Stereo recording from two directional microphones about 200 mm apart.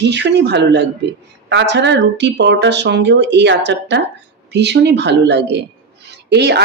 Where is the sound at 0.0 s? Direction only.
60° right (ahead or behind).